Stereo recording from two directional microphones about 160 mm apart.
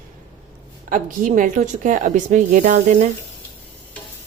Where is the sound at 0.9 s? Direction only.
55° right (ahead or behind).